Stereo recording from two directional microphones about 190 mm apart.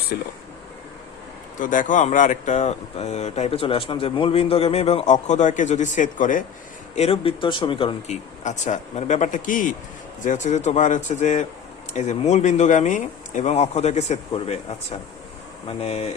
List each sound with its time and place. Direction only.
1.5 s speech: 45° left (ahead or behind)
6.9 s speech: 35° left (ahead or behind)